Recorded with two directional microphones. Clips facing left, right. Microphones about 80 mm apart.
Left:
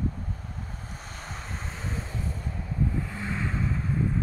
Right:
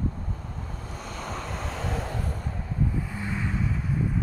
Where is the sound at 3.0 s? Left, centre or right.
Centre.